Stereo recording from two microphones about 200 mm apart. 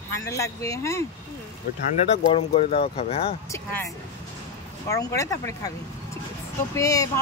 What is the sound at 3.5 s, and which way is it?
Speech, 10° left (ahead or behind).